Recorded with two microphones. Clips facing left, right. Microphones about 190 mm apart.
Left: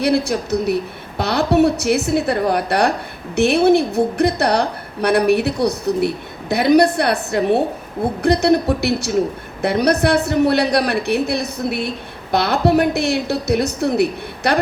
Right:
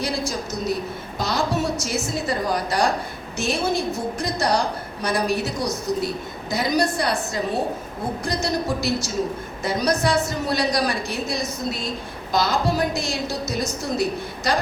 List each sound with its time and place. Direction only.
0.0 s a woman's voice: 65° left (ahead or behind)